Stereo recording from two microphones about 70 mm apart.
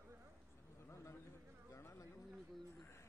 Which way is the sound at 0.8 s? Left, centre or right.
Left.